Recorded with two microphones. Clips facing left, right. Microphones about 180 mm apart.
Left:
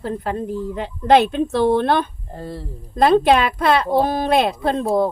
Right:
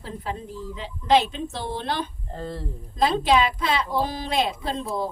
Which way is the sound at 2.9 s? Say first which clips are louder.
Left 6 dB; 60° left (ahead or behind).